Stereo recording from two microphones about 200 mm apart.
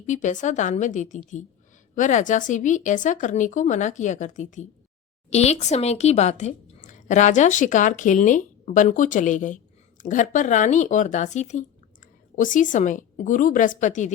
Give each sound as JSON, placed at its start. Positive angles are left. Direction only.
{"t": 0.0, "sound": "a woman's voice", "side_deg": 40}